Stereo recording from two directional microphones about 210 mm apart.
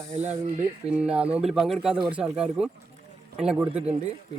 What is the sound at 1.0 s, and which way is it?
Speech, 5° right (ahead or behind).